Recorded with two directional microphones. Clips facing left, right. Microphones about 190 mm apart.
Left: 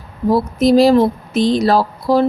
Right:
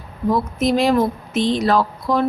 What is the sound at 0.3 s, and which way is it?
Speech, 35° left (ahead or behind).